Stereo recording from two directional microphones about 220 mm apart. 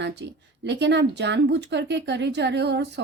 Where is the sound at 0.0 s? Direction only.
50° right (ahead or behind).